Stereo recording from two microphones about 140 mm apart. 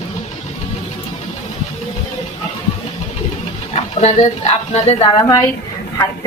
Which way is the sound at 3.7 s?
50° left (ahead or behind).